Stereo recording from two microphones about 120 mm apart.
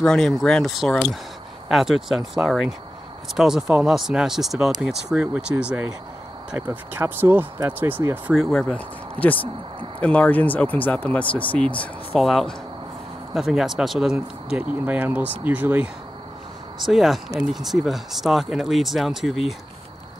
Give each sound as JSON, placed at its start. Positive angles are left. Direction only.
{"t": 0.0, "sound": "speech", "side_deg": 5}
{"t": 8.4, "sound": "speech", "side_deg": 5}
{"t": 16.7, "sound": "speech", "side_deg": 0}